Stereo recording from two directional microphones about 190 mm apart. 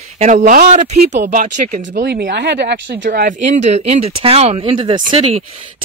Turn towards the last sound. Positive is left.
turn(degrees=-30)  # may be behind; listen again after turning